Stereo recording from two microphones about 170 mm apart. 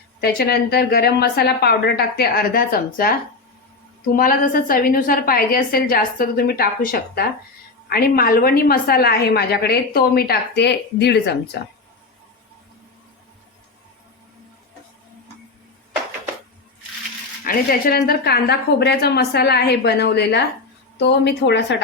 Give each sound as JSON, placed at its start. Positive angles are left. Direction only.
{"t": 0.2, "sound": "a woman's voice", "side_deg": 65}
{"t": 17.4, "sound": "a woman's voice", "side_deg": 60}
{"t": 21.0, "sound": "a woman's voice", "side_deg": 90}